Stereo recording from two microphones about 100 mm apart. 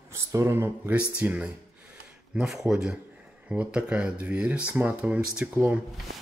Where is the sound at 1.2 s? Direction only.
15° right (ahead or behind).